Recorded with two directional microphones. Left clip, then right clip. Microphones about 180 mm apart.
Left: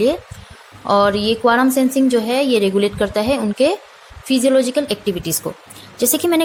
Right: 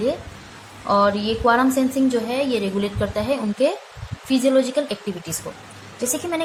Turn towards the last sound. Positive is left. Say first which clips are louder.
# left 8 dB
turn(degrees=55)  # may be behind; listen again after turning